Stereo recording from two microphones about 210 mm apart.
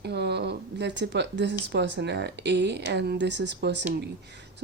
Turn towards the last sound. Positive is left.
turn(degrees=-55)  # may be behind; listen again after turning